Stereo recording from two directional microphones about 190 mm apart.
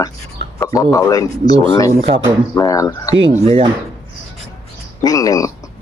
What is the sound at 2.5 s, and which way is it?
Speech, 15° left (ahead or behind).